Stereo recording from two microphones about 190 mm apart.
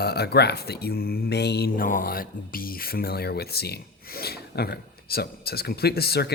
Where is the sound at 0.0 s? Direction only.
55° left (ahead or behind).